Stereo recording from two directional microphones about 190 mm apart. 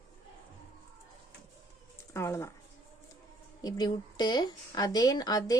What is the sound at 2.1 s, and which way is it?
Speech, 15° left (ahead or behind).